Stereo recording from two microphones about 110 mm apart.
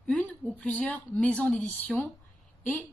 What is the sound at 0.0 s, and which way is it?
A woman's voice, 10° left (ahead or behind).